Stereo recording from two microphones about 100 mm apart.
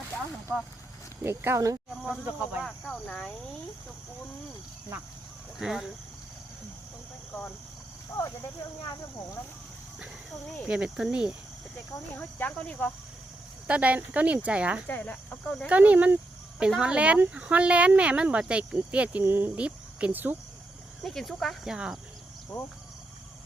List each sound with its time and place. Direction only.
1.2 s speech: 25° right (ahead or behind)
2.0 s speech: 10° right (ahead or behind)
2.6 s speech: 5° left (ahead or behind)
5.5 s speech: 5° right (ahead or behind)
8.9 s speech: 30° left (ahead or behind)
10.7 s speech: 10° right (ahead or behind)
12.4 s speech: 15° left (ahead or behind)
13.7 s speech: 15° right (ahead or behind)
14.8 s speech: 20° left (ahead or behind)
15.6 s speech: 15° right (ahead or behind)
21.0 s speech: centre (ahead or behind)